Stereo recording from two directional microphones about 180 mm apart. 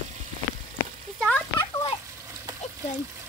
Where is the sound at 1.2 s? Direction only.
5° left (ahead or behind).